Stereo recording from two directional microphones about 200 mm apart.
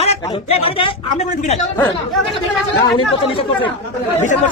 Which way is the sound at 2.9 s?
25° left (ahead or behind).